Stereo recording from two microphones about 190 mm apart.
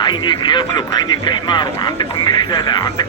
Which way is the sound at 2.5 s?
20° left (ahead or behind).